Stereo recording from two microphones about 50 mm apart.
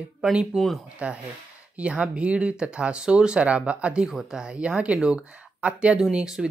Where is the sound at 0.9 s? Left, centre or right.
Right.